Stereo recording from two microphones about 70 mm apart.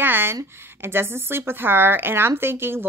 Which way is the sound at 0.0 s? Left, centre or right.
Right.